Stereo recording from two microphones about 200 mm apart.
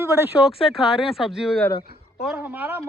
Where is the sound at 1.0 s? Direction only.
Centre (ahead or behind).